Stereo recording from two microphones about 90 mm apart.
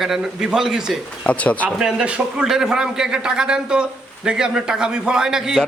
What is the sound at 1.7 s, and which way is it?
A man's voice, 10° right (ahead or behind).